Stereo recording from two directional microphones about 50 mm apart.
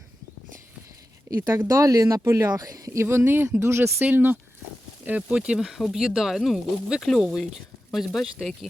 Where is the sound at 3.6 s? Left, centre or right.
Right.